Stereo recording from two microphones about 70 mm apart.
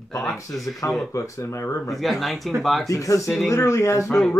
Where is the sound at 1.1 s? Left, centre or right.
Left.